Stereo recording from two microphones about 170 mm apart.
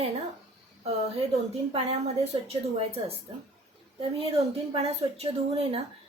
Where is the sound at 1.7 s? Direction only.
35° right (ahead or behind).